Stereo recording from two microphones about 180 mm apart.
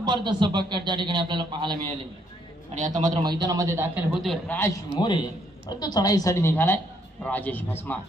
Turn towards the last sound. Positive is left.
turn(degrees=10)  # may be behind; listen again after turning